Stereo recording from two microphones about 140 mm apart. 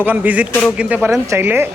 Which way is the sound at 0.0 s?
10° right (ahead or behind).